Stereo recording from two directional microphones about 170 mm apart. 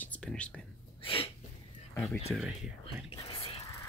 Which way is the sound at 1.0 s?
30° left (ahead or behind).